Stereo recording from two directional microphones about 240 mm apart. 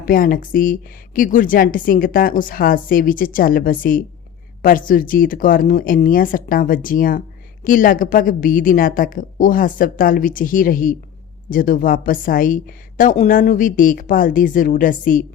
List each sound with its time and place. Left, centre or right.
0.0 s a woman's voice: left